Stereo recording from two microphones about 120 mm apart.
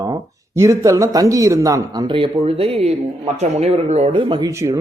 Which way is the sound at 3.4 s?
65° right (ahead or behind).